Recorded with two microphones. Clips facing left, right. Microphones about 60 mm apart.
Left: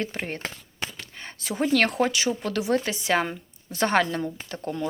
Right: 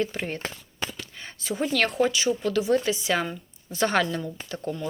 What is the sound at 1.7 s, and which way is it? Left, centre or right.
Speech, left.